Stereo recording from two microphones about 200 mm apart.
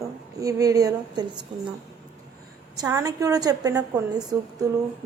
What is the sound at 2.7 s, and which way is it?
A woman's voice, 15° right (ahead or behind).